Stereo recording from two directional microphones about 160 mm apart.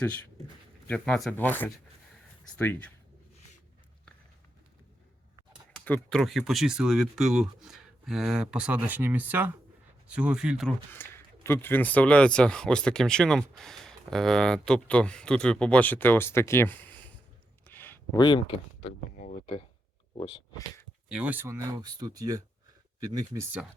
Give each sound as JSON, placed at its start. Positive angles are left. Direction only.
{"t": 0.9, "sound": "speech", "side_deg": 5}
{"t": 5.8, "sound": "speech", "side_deg": 5}
{"t": 10.9, "sound": "speech", "side_deg": 15}
{"t": 17.7, "sound": "a sound", "side_deg": 10}
{"t": 18.2, "sound": "speech", "side_deg": 30}
{"t": 19.1, "sound": "a sound", "side_deg": 55}
{"t": 20.1, "sound": "speech", "side_deg": 40}
{"t": 21.1, "sound": "speech", "side_deg": -5}
{"t": 21.4, "sound": "speech", "side_deg": -15}